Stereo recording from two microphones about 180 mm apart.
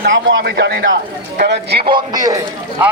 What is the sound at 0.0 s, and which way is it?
A man's voice, 85° right.